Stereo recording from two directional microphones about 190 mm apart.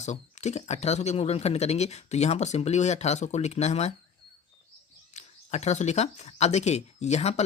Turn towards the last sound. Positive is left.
turn(degrees=35)  # may be behind; listen again after turning